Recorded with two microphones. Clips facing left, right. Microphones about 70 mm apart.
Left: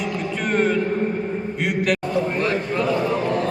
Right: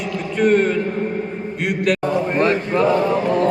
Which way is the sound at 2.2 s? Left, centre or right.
Right.